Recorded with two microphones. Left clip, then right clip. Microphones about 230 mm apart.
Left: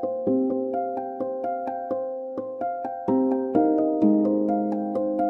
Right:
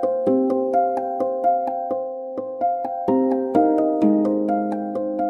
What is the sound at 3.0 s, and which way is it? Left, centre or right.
Music, right.